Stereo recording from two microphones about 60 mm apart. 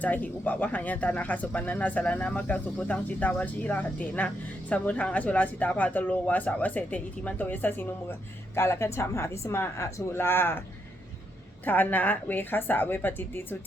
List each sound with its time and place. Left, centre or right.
0.0 s speech: left
8.5 s a woman's voice: left
11.6 s a woman's voice: left